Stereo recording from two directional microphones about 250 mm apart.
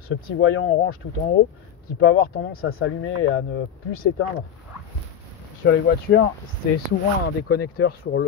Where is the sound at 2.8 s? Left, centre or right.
Left.